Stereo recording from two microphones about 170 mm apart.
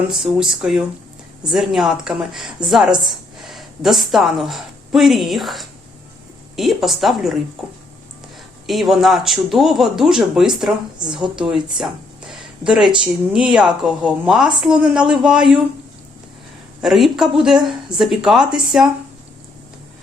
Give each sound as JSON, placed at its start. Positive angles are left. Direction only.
{"t": 0.1, "sound": "a woman's voice", "side_deg": -5}
{"t": 8.6, "sound": "a woman's voice", "side_deg": 0}
{"t": 12.3, "sound": "a sound", "side_deg": 0}
{"t": 13.3, "sound": "a woman's voice", "side_deg": -5}
{"t": 16.8, "sound": "a woman's voice", "side_deg": 0}